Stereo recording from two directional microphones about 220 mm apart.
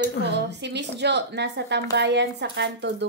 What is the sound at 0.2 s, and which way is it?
A woman's voice, 50° right (ahead or behind).